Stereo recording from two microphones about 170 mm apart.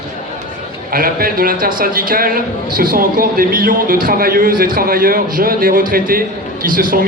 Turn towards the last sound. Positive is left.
turn(degrees=-55)  # may be behind; listen again after turning